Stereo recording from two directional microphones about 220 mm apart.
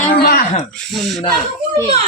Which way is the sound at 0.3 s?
45° left (ahead or behind).